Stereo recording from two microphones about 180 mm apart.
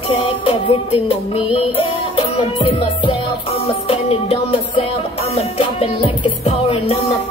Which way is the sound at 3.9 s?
30° left (ahead or behind).